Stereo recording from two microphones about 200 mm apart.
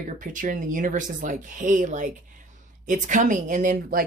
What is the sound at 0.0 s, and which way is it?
Speech, 40° right (ahead or behind).